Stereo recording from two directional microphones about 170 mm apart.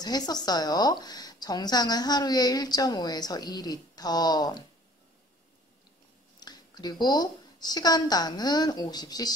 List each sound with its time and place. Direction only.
0.0 s a woman's voice: 25° left (ahead or behind)
6.4 s a woman's voice: 25° left (ahead or behind)